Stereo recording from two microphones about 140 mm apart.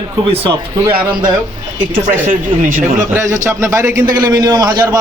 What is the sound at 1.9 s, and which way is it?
Speech, 80° right.